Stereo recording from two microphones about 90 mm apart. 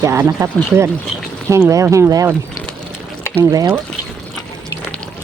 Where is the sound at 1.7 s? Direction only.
35° right (ahead or behind).